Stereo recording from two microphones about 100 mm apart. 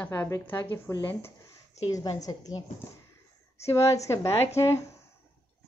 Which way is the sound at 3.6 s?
30° left (ahead or behind).